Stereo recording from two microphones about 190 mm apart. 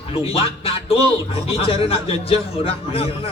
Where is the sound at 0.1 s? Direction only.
30° left (ahead or behind).